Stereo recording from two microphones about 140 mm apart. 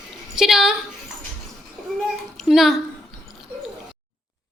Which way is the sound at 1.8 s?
Centre (ahead or behind).